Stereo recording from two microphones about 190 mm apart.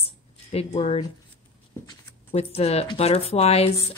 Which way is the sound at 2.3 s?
35° left (ahead or behind).